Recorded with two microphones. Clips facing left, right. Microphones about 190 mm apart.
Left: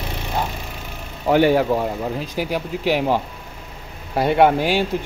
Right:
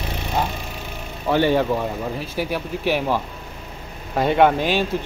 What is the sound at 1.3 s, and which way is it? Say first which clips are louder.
Speech: left 3 dB; 10° left (ahead or behind).